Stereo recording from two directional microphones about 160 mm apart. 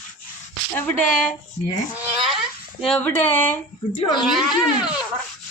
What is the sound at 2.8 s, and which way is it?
Speech, 5° left (ahead or behind).